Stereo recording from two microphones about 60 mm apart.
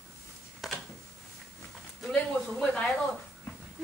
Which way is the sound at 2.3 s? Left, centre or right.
Centre.